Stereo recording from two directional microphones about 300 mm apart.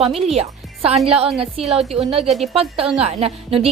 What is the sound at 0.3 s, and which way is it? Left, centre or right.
Music, centre.